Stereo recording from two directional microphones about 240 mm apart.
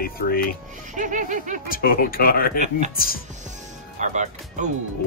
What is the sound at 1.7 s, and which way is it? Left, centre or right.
Speech, left.